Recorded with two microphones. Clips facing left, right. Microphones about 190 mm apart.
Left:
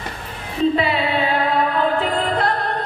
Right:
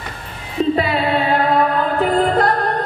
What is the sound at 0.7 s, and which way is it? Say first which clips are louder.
Music: right 2 dB; 45° right (ahead or behind).